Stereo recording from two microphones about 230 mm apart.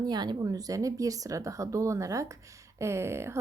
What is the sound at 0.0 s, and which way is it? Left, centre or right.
Speech, centre.